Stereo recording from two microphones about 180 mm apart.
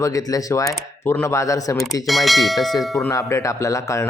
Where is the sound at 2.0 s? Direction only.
Centre (ahead or behind).